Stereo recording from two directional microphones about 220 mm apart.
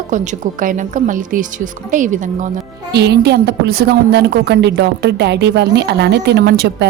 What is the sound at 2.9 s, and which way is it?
A woman's voice, 50° right (ahead or behind).